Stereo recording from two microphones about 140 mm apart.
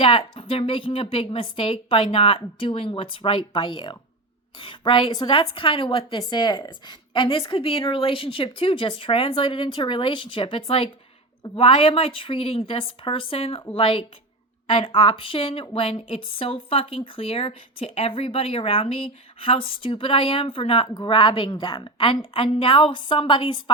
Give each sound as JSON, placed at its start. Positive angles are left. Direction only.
{"t": 0.0, "sound": "speech", "side_deg": 40}